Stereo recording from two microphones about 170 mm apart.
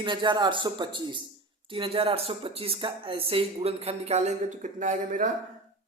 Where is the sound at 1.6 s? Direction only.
30° right (ahead or behind); by 5.3 s 50° right (ahead or behind).